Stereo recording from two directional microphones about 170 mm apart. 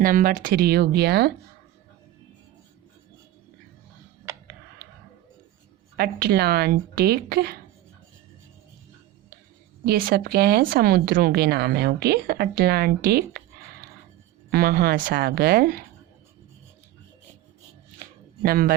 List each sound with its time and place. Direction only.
0.0 s speech: 55° right (ahead or behind); by 1.3 s 70° right (ahead or behind)
6.0 s speech: 65° right (ahead or behind)
9.8 s speech: 60° right (ahead or behind)
14.5 s speech: 65° right (ahead or behind)
18.0 s shuffling cards: 60° right (ahead or behind)